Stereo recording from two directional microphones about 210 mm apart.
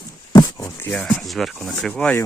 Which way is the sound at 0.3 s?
15° left (ahead or behind).